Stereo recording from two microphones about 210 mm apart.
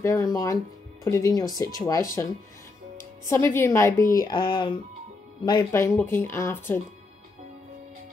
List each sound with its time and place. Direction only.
0.0 s a woman's voice: 15° left (ahead or behind)
3.3 s a woman's voice: 10° left (ahead or behind)